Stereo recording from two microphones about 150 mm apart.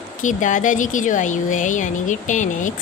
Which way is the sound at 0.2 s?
60° left (ahead or behind).